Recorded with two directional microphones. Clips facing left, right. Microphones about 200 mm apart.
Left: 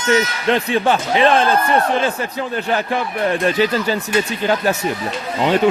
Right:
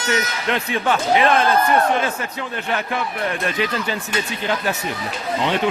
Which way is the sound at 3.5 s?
35° left (ahead or behind).